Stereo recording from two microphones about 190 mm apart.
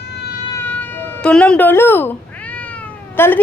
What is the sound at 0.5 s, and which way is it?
Cat, 10° left (ahead or behind).